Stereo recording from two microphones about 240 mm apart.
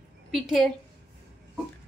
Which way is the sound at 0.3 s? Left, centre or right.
Centre.